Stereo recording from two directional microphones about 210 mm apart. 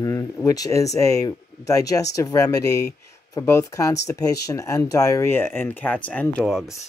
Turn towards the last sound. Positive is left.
turn(degrees=0)  # may be behind; listen again after turning